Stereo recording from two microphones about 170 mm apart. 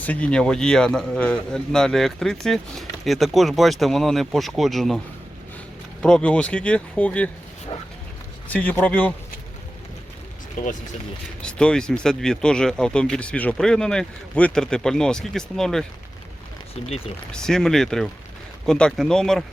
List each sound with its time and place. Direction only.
0.0 s speech: 10° left (ahead or behind)
6.0 s speech: 5° left (ahead or behind)
8.4 s speech: 10° left (ahead or behind)
10.6 s speech: 50° left (ahead or behind)
11.4 s speech: 5° left (ahead or behind)
17.3 s speech: 5° left (ahead or behind)